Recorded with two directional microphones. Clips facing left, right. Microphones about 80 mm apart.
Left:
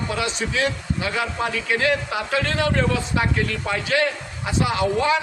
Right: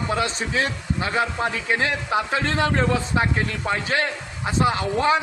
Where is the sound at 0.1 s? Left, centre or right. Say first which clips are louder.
Right 1 dB; right.